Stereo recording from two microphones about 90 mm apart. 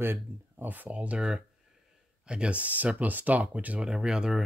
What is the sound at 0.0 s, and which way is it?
Speech, 25° right (ahead or behind).